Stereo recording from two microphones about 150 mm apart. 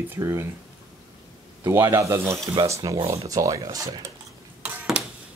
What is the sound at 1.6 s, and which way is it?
Speech, 20° right (ahead or behind).